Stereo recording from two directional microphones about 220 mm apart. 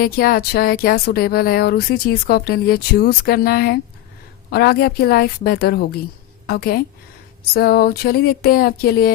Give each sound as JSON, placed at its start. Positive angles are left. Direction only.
{"t": 0.0, "sound": "speech", "side_deg": 45}